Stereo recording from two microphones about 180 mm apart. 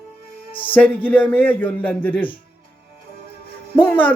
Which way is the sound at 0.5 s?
10° left (ahead or behind).